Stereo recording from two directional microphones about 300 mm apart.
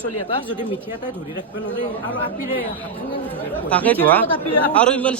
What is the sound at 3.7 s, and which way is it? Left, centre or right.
Speech, centre.